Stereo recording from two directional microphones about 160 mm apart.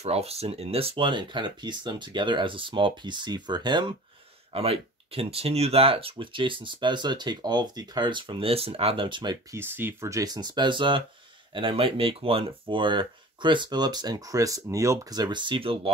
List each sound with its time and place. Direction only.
0.0 s speech: 40° right (ahead or behind)
9.6 s speech: 15° right (ahead or behind); by 15.9 s 35° right (ahead or behind)